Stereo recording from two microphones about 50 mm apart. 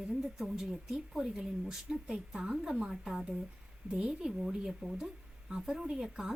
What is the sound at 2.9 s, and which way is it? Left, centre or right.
Speech, centre.